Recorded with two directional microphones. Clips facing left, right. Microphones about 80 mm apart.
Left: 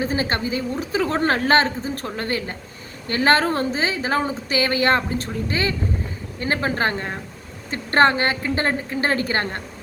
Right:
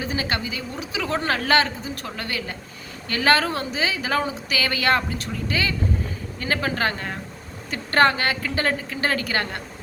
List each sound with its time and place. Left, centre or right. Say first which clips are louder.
0.0 s a woman's voice: left 4 dB; left